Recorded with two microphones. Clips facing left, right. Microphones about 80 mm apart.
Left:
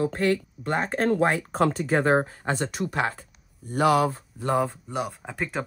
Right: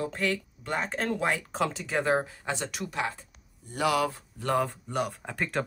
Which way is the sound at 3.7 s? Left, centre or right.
Left.